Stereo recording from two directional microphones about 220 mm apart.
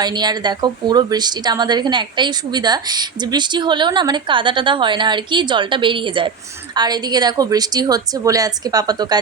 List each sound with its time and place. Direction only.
0.0 s a woman's voice: 20° right (ahead or behind)